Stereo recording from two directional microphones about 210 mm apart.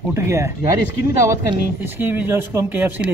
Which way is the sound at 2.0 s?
10° right (ahead or behind).